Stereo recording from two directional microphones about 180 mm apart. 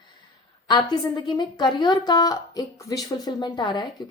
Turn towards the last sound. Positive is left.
turn(degrees=25)  # may be behind; listen again after turning